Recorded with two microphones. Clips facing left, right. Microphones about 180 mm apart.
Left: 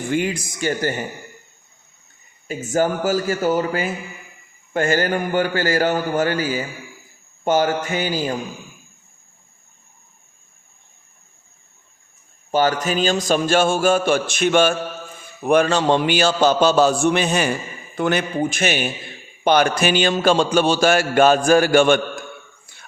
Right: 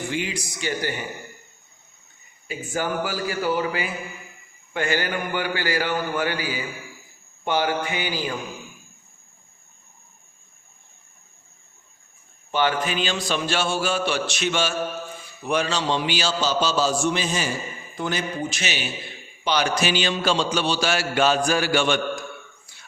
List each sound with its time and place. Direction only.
0.1 s speech: 50° left (ahead or behind)
2.5 s speech: 45° left (ahead or behind)
12.5 s a man's voice: 40° left (ahead or behind)
22.6 s a sound: 55° left (ahead or behind)